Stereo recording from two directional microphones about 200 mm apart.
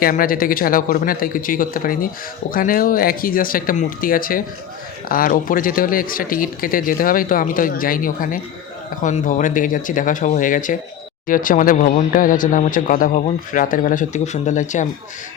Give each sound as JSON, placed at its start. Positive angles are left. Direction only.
{"t": 0.0, "sound": "speech", "side_deg": 45}